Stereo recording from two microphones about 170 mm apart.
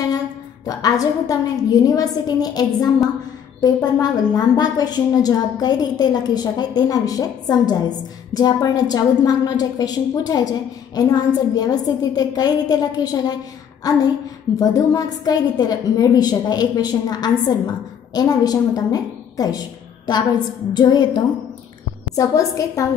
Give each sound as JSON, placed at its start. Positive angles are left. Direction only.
{"t": 0.7, "sound": "a woman's voice", "side_deg": 20}
{"t": 20.7, "sound": "a woman's voice", "side_deg": 25}